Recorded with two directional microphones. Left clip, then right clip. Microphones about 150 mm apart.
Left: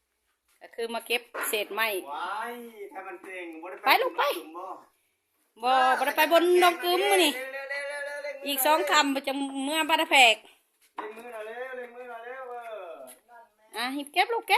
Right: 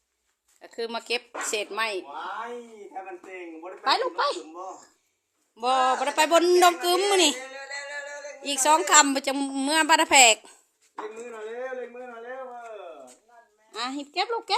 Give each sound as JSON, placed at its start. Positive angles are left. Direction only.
{"t": 0.6, "sound": "speech", "side_deg": 0}
{"t": 3.2, "sound": "speech", "side_deg": 0}
{"t": 3.8, "sound": "speech", "side_deg": 20}
{"t": 5.5, "sound": "speech", "side_deg": 0}
{"t": 6.5, "sound": "speech", "side_deg": -10}
{"t": 7.7, "sound": "a sound", "side_deg": 5}
{"t": 8.4, "sound": "a woman's voice", "side_deg": -5}
{"t": 13.7, "sound": "speech", "side_deg": 0}